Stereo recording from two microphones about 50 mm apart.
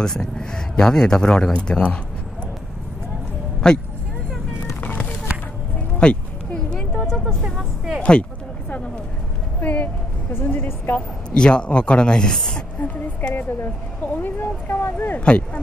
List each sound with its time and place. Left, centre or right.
0.0 s speech: centre
3.6 s speech: centre
4.8 s a sound: left
5.9 s a sound: left
7.4 s speech: centre
8.1 s a sound: left
9.6 s a woman's voice: left
11.3 s speech: centre
13.2 s a woman's voice: left
15.1 s speech: left